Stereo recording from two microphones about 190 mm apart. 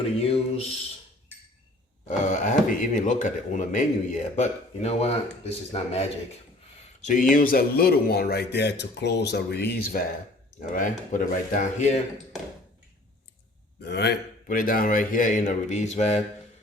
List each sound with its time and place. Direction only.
0.2 s a man's voice: 30° left (ahead or behind)
2.0 s a man's voice: 40° left (ahead or behind); by 10.0 s 60° left (ahead or behind)
10.6 s a man's voice: 45° left (ahead or behind)
13.8 s a man's voice: 60° left (ahead or behind); by 16.2 s 35° left (ahead or behind)